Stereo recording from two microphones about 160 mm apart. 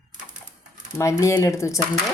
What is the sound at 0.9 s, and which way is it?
Speech, 15° left (ahead or behind).